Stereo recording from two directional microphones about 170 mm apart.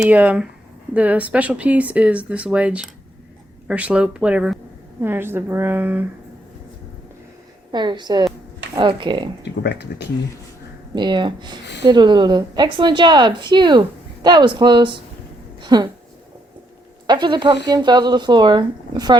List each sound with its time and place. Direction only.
0.0 s speech: 10° right (ahead or behind)
7.7 s a woman's voice: 25° right (ahead or behind)
9.4 s speech: 80° left
10.9 s a woman's voice: 25° right (ahead or behind)
17.1 s a woman's voice: 25° right (ahead or behind)